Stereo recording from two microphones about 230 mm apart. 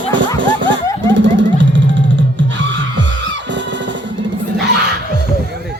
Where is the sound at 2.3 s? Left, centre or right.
Right.